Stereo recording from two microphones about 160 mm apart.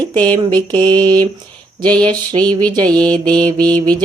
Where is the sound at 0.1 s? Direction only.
25° right (ahead or behind).